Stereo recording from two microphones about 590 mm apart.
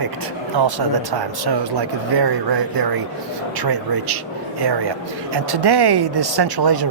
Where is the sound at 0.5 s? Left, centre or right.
Right.